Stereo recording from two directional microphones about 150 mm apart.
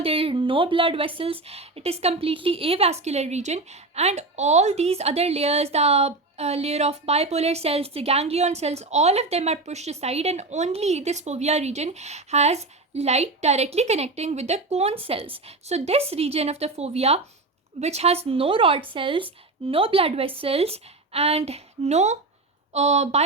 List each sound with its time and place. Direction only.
0.0 s speech: 40° right (ahead or behind)